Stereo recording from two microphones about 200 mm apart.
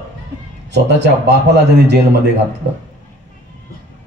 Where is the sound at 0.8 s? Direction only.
60° right (ahead or behind).